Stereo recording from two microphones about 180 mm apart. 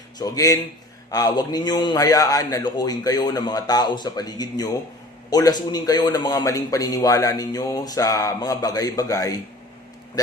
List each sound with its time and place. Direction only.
0.2 s a man's voice: 20° left (ahead or behind)